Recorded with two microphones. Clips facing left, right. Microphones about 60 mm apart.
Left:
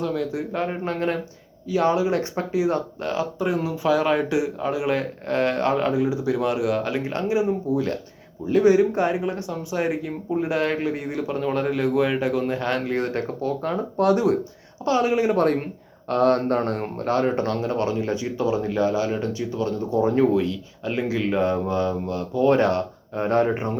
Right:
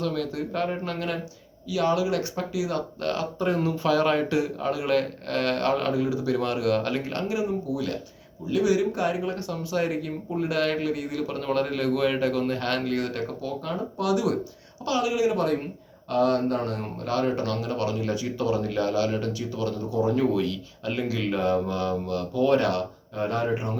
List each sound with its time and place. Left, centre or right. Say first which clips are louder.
0.0 s speech: left 3 dB; centre
1.7 s speech: left 3 dB; left
3.0 s speech: left 2 dB; centre; by 20.2 s left
20.3 s speech: left 4 dB; left